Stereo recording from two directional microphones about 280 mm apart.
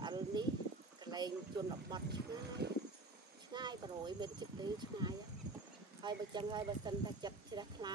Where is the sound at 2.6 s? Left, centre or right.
Right.